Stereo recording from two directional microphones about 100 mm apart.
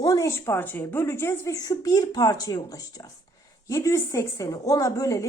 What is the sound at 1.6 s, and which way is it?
A woman's voice, 40° left (ahead or behind).